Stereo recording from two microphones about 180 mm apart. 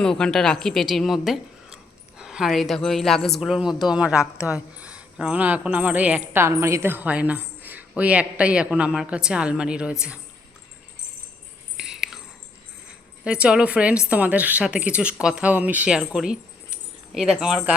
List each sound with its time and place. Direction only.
0.0 s a woman's voice: 5° left (ahead or behind)
11.8 s a sound: centre (ahead or behind)
13.2 s a woman's voice: 5° right (ahead or behind)